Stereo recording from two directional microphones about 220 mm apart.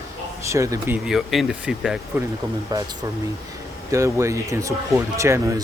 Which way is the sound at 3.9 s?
15° right (ahead or behind).